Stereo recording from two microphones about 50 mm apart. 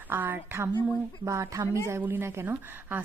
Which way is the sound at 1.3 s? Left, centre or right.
Right.